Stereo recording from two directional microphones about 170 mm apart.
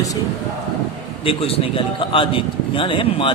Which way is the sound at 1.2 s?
35° left (ahead or behind).